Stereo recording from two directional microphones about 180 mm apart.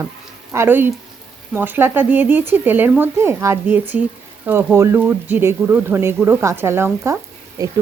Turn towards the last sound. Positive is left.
turn(degrees=-20)  # may be behind; listen again after turning